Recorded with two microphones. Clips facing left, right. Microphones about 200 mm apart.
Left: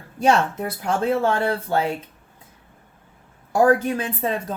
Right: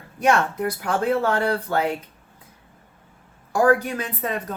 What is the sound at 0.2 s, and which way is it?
Speech, 25° left (ahead or behind).